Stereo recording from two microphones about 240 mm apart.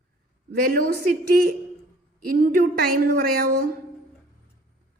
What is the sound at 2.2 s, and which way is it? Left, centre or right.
Speech, right.